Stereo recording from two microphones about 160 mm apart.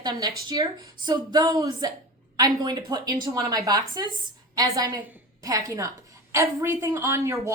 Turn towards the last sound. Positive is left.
turn(degrees=-15)  # may be behind; listen again after turning